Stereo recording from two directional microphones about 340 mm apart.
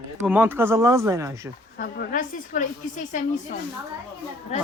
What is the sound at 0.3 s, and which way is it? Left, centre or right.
Speech, centre.